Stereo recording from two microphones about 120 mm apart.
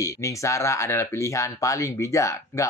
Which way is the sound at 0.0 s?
25° left (ahead or behind).